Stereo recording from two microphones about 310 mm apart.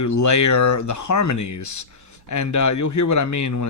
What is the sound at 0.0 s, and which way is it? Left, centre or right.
Speech, left.